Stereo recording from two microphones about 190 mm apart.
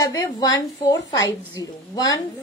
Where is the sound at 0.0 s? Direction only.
20° left (ahead or behind).